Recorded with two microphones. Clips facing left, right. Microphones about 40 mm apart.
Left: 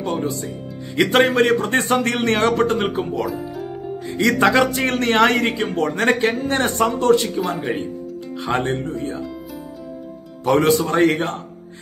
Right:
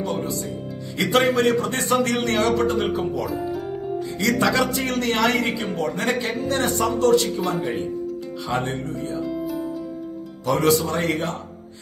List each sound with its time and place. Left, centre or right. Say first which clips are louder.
0.0 s speech: left 2 dB; left
3.3 s music: even; centre
4.2 s speech: left 5 dB; left
7.3 s speech: left 2 dB; centre
8.5 s speech: left 4 dB; left
9.2 s music: right 5 dB; centre
10.4 s speech: left 3 dB; left